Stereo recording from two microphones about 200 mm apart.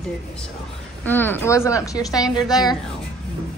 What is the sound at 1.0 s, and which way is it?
Speech, 10° left (ahead or behind).